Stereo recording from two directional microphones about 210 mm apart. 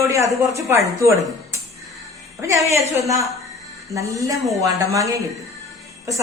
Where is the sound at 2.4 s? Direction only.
15° right (ahead or behind).